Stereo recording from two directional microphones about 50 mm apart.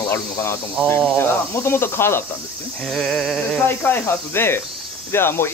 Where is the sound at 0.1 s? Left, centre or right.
Left.